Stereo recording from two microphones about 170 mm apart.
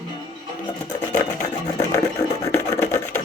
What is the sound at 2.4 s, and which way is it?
Wood, 15° left (ahead or behind).